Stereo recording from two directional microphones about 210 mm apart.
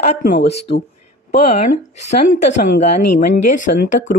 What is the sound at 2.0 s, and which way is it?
Speech, 35° left (ahead or behind).